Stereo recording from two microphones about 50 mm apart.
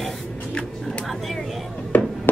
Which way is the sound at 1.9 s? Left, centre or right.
Left.